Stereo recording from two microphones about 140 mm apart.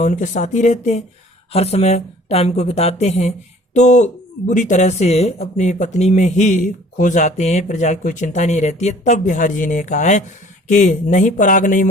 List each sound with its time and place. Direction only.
0.0 s a woman's voice: 60° left (ahead or behind)